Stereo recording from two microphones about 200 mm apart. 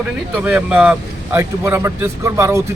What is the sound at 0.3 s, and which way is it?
Speech, 5° right (ahead or behind).